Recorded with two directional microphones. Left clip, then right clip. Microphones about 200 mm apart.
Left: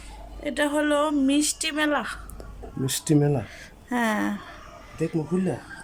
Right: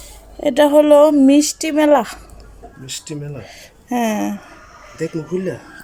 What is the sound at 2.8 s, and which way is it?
Speech, 40° left (ahead or behind).